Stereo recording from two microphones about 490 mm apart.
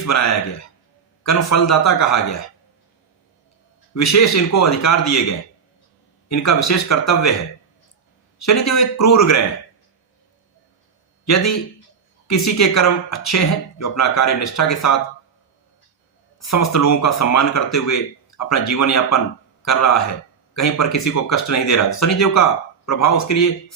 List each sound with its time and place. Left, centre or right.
0.0 s speech: left
3.9 s speech: left
6.2 s speech: left
8.4 s speech: left
11.3 s speech: left
16.5 s speech: left